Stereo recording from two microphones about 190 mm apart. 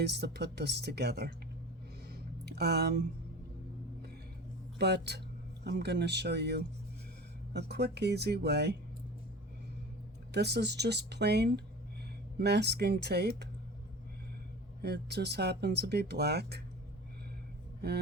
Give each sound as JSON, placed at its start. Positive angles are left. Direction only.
{"t": 0.0, "sound": "speech", "side_deg": -60}
{"t": 2.0, "sound": "a sound", "side_deg": -60}
{"t": 4.8, "sound": "speech", "side_deg": -60}
{"t": 10.3, "sound": "speech", "side_deg": -60}
{"t": 14.8, "sound": "speech", "side_deg": -60}
{"t": 17.8, "sound": "speech", "side_deg": -55}